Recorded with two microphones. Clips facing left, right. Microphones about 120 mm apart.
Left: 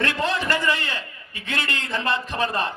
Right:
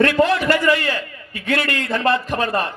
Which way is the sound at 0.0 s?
25° left (ahead or behind).